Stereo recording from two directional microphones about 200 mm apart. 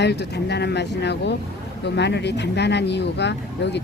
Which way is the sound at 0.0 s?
55° left (ahead or behind).